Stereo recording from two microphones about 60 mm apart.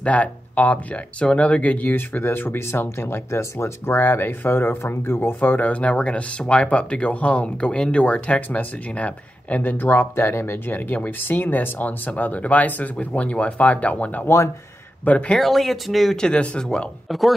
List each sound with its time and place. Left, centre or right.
0.0 s speech: left
14.2 s speech: left
15.0 s speech: left
15.3 s speech: centre